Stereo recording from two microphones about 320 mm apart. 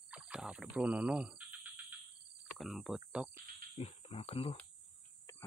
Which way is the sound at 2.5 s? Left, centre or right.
Centre.